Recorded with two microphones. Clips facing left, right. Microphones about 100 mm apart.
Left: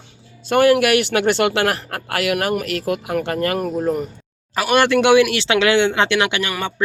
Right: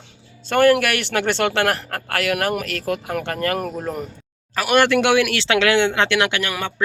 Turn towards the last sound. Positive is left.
turn(degrees=0)  # may be behind; listen again after turning